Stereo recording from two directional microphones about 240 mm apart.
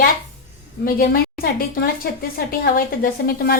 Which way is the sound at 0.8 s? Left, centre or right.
Left.